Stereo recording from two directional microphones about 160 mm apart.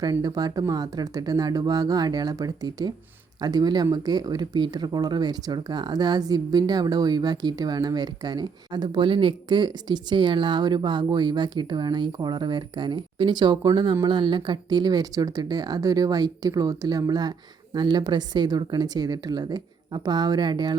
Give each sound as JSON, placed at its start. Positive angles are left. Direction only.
{"t": 0.0, "sound": "speech", "side_deg": -25}